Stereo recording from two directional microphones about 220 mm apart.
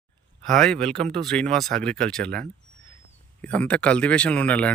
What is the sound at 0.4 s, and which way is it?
Speech, centre (ahead or behind).